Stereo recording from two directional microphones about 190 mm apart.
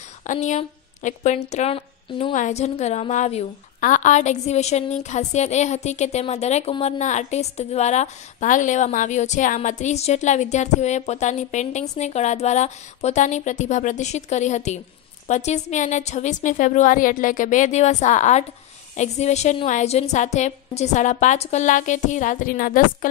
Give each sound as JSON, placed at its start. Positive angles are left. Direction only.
{"t": 0.2, "sound": "a woman's voice", "side_deg": 40}